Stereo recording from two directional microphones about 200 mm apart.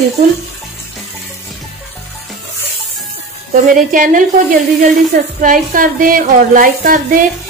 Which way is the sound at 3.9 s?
40° right (ahead or behind).